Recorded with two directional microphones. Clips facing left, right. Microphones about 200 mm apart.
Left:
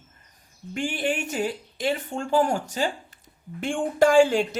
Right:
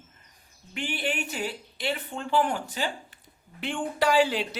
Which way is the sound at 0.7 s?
45° left (ahead or behind).